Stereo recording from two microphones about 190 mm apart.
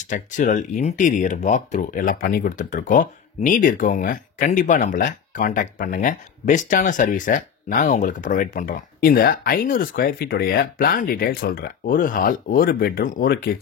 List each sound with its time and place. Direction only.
0.0 s speech: 40° left (ahead or behind)